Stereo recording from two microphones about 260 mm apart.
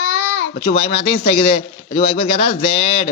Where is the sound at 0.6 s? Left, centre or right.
Left.